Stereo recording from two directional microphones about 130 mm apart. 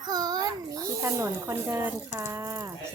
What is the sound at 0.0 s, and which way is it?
Babbling, 30° right (ahead or behind).